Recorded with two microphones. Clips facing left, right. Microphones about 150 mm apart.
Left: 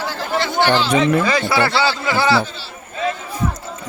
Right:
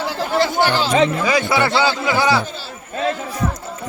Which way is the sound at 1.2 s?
15° right (ahead or behind).